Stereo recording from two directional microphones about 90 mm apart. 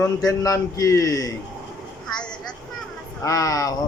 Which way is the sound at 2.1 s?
10° left (ahead or behind).